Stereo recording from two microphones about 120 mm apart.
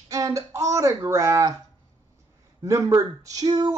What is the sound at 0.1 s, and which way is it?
Speech, 30° right (ahead or behind).